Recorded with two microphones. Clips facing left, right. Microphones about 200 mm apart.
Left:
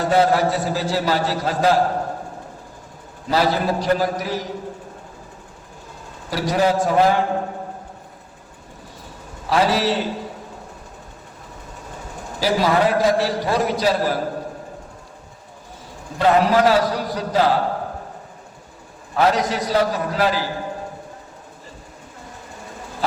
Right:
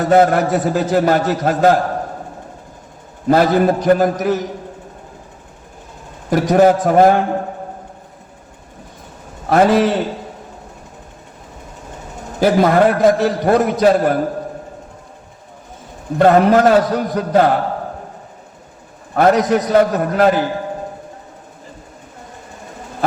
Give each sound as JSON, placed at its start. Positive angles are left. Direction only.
{"t": 0.0, "sound": "a man's voice", "side_deg": -50}
{"t": 3.2, "sound": "a man's voice", "side_deg": -50}
{"t": 6.3, "sound": "a man's voice", "side_deg": -50}
{"t": 9.5, "sound": "a man's voice", "side_deg": -50}
{"t": 12.4, "sound": "a man's voice", "side_deg": -55}
{"t": 16.1, "sound": "a man's voice", "side_deg": -50}
{"t": 19.1, "sound": "a man's voice", "side_deg": -50}